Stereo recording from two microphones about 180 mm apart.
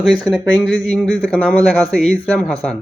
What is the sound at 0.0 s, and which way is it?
Speech, centre (ahead or behind).